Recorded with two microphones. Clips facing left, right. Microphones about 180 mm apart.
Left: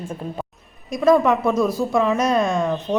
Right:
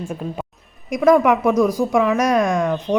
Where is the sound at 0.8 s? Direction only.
15° right (ahead or behind).